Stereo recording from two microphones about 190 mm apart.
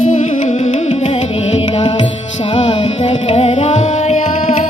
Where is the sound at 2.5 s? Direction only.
25° left (ahead or behind).